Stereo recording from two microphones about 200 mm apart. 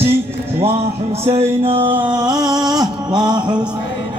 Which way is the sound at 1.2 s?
30° right (ahead or behind).